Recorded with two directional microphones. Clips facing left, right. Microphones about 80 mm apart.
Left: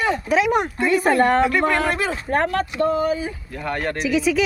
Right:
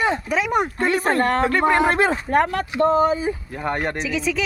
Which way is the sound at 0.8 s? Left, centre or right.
Right.